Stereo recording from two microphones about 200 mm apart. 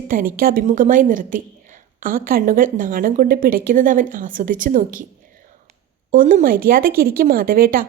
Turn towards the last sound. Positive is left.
turn(degrees=-45)  # may be behind; listen again after turning